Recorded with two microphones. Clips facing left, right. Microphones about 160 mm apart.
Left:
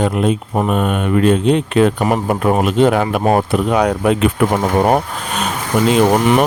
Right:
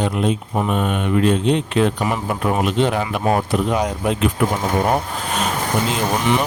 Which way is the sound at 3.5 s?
65° left (ahead or behind).